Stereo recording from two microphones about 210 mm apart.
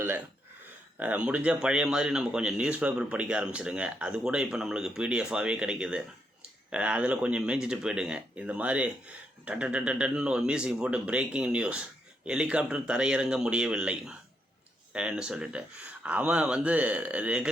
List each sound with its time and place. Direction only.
0.9 s speech: 5° right (ahead or behind)